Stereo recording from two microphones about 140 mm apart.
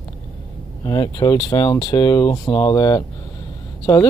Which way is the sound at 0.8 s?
30° left (ahead or behind).